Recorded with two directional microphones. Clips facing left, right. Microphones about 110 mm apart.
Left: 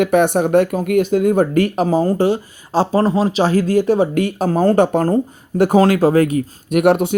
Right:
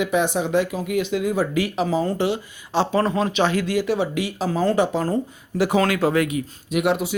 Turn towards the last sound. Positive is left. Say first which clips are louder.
# left 7 dB
turn(degrees=60)  # may be behind; listen again after turning